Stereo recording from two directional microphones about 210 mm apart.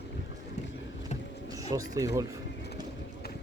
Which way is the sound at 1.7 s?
15° right (ahead or behind).